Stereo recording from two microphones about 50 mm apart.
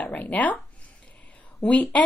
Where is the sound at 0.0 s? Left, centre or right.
Left.